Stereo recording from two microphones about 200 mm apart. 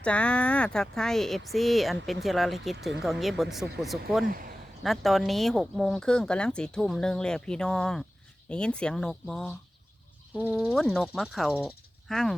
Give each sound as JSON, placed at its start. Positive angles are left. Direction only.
{"t": 0.0, "sound": "speech", "side_deg": 5}
{"t": 4.3, "sound": "speech", "side_deg": -45}
{"t": 4.8, "sound": "speech", "side_deg": 0}